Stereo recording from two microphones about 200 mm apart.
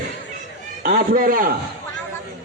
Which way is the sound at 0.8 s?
45° right (ahead or behind).